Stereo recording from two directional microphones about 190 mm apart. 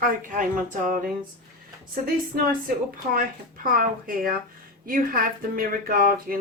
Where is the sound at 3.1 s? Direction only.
50° right (ahead or behind).